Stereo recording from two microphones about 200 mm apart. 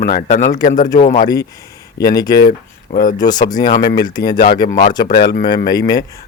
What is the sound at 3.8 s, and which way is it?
Speech, 50° left (ahead or behind).